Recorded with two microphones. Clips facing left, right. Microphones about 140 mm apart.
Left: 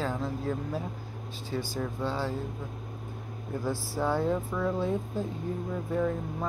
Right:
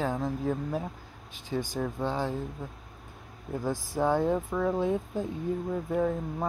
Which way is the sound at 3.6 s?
15° right (ahead or behind).